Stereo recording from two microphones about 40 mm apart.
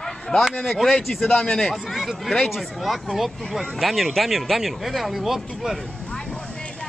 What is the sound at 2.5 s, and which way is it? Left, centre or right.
Speech, centre.